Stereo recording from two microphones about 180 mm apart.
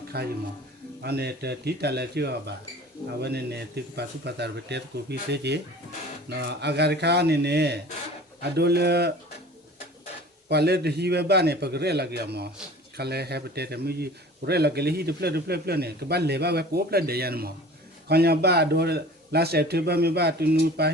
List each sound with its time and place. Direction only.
0.1 s a man's voice: 60° right (ahead or behind)
10.5 s a man's voice: 65° right (ahead or behind)